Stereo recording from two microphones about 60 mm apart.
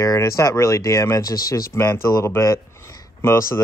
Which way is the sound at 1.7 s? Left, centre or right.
Left.